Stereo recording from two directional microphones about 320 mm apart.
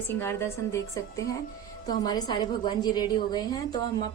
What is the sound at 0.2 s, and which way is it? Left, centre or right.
A woman's voice, centre.